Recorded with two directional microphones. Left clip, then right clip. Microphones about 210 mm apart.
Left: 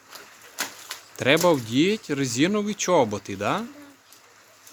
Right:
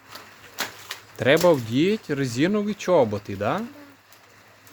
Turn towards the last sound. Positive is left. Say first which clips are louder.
# even
turn(degrees=5)  # may be behind; listen again after turning